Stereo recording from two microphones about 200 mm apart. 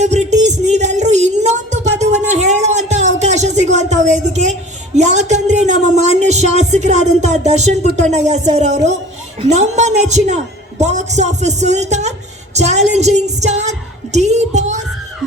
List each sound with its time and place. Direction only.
0.0 s music: 35° right (ahead or behind)
3.2 s a sound: 35° right (ahead or behind)
3.8 s a woman's voice: 35° right (ahead or behind)